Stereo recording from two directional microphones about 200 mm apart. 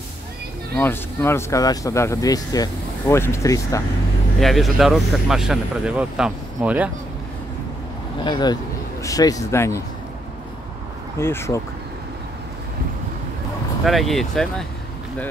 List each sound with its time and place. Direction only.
0.7 s speech: 10° left (ahead or behind)
4.4 s speech: centre (ahead or behind)
8.2 s speech: 20° left (ahead or behind)
11.1 s speech: 10° left (ahead or behind)
13.8 s speech: centre (ahead or behind)